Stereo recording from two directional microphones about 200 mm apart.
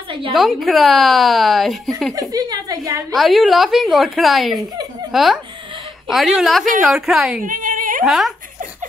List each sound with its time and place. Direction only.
0.3 s speech: centre (ahead or behind)
2.1 s a woman's voice: 20° right (ahead or behind)
3.1 s speech: centre (ahead or behind)
7.4 s a sound: 40° right (ahead or behind)
8.0 s speech: centre (ahead or behind)